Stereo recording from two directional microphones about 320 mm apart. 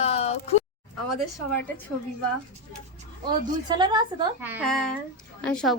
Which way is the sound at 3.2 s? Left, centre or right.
Centre.